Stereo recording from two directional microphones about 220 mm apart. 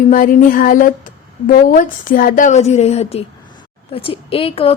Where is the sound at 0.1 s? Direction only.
40° left (ahead or behind).